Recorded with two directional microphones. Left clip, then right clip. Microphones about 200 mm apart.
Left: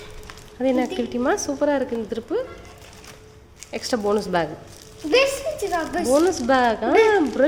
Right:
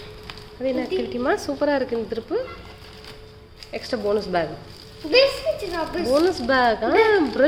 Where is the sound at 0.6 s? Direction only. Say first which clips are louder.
Left 2 dB; 20° left (ahead or behind).